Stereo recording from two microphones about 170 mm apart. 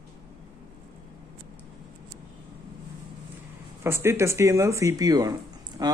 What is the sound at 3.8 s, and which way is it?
Speech, 15° right (ahead or behind).